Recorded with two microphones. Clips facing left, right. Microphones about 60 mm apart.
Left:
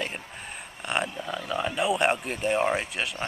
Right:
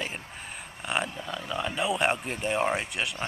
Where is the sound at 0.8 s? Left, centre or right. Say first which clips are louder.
Left 1 dB; centre.